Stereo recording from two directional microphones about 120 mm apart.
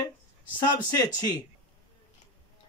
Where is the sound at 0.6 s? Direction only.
30° left (ahead or behind).